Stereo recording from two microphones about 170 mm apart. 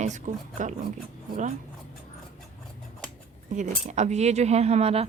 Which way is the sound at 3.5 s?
45° right (ahead or behind).